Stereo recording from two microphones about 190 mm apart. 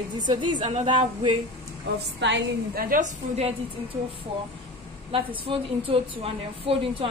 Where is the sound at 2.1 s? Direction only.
65° right (ahead or behind); by 3.5 s 40° right (ahead or behind).